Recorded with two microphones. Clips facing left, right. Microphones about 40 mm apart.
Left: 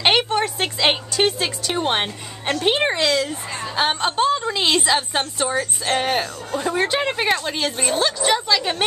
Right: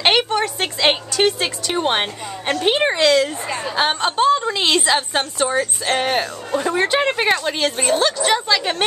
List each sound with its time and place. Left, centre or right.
0.0 s a sound: centre
1.4 s a woman's voice: centre
6.5 s speech: right
6.8 s a woman's voice: centre
7.7 s a woman's voice: right
8.0 s a woman's voice: centre